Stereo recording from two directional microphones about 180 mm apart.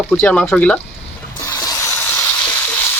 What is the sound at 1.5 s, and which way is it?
Sanding, 20° left (ahead or behind).